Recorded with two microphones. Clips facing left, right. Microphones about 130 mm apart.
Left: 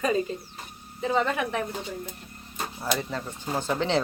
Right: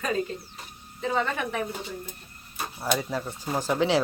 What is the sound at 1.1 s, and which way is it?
Speech, centre (ahead or behind).